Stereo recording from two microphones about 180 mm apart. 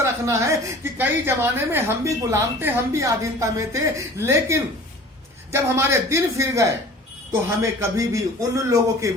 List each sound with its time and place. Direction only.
0.0 s a woman's voice: 15° right (ahead or behind)